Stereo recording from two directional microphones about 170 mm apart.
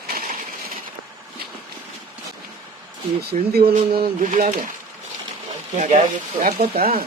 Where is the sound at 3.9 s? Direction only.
55° right (ahead or behind).